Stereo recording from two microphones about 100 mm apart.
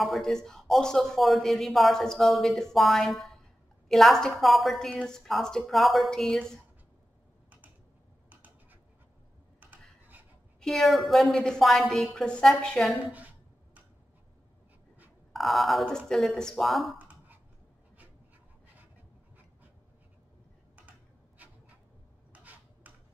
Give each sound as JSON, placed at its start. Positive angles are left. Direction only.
{"t": 0.0, "sound": "a man's voice", "side_deg": 0}
{"t": 9.6, "sound": "rub", "side_deg": -15}
{"t": 10.6, "sound": "a man's voice", "side_deg": 0}
{"t": 13.0, "sound": "a woman's voice", "side_deg": -15}
{"t": 15.3, "sound": "a man's voice", "side_deg": 0}
{"t": 17.0, "sound": "a sound", "side_deg": -15}
{"t": 21.4, "sound": "a sound", "side_deg": -15}